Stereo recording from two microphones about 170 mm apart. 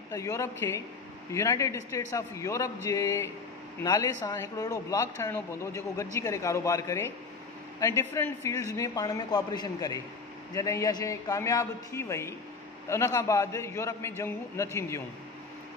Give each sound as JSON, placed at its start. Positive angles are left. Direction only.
{"t": 0.1, "sound": "a man's voice", "side_deg": 20}